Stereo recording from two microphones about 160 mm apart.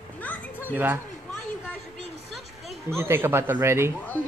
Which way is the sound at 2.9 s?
15° right (ahead or behind).